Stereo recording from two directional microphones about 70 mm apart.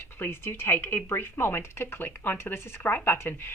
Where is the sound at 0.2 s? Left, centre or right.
Left.